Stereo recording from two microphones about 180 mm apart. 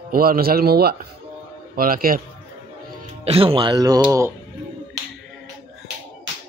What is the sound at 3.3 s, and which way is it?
Speech, 30° right (ahead or behind).